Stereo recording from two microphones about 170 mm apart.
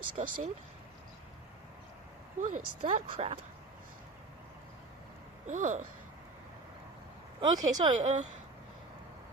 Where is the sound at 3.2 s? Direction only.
35° right (ahead or behind).